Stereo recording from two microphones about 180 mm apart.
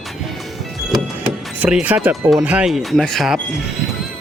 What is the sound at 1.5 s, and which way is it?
Speech, 10° right (ahead or behind).